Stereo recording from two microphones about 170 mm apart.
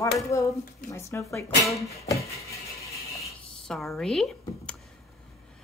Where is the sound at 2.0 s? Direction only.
20° left (ahead or behind).